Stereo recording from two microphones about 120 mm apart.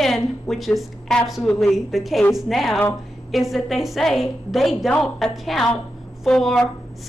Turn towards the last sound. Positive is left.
turn(degrees=5)  # may be behind; listen again after turning